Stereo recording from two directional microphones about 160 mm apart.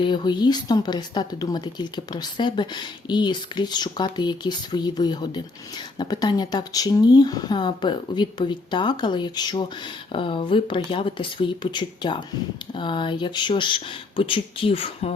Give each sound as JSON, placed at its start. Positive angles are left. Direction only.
{"t": 0.0, "sound": "speech", "side_deg": 30}